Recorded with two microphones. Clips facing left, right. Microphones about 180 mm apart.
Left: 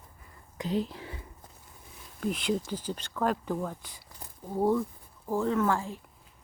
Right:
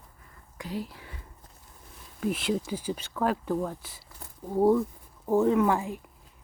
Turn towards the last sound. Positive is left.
turn(degrees=-15)  # may be behind; listen again after turning